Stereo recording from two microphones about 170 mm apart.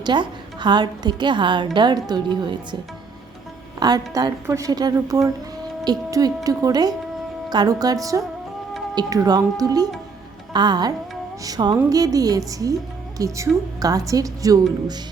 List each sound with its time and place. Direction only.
0.0 s a woman's voice: 25° right (ahead or behind)
3.8 s a woman's voice: 25° right (ahead or behind)